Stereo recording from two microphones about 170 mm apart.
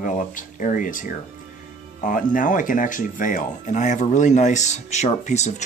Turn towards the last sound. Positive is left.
turn(degrees=40)  # may be behind; listen again after turning